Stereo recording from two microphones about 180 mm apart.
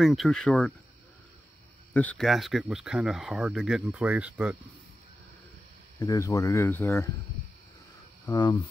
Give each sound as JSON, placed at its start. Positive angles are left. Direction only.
{"t": 0.0, "sound": "speech", "side_deg": 0}
{"t": 2.0, "sound": "speech", "side_deg": 5}
{"t": 5.9, "sound": "speech", "side_deg": 15}
{"t": 8.3, "sound": "speech", "side_deg": 25}